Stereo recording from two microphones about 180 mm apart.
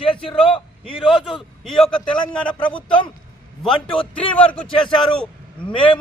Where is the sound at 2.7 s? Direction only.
30° left (ahead or behind).